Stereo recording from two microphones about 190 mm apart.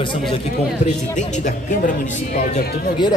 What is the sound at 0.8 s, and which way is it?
Speech, 40° left (ahead or behind).